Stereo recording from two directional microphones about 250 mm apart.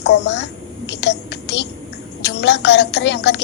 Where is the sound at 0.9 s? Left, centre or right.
Left.